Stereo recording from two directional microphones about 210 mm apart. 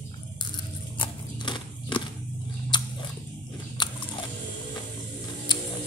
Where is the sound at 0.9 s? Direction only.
20° left (ahead or behind).